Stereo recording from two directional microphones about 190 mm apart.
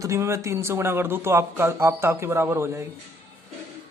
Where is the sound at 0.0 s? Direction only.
15° right (ahead or behind).